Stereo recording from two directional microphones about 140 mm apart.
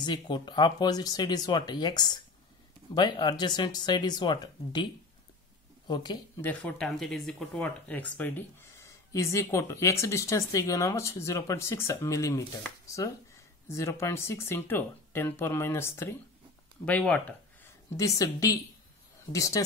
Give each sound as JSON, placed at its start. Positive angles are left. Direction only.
{"t": 0.0, "sound": "speech", "side_deg": 30}
{"t": 5.9, "sound": "speech", "side_deg": 30}
{"t": 6.4, "sound": "speech", "side_deg": 10}
{"t": 13.7, "sound": "speech", "side_deg": 20}
{"t": 17.9, "sound": "speech", "side_deg": 25}